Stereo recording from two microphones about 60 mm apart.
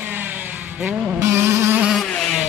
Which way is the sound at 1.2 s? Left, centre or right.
Right.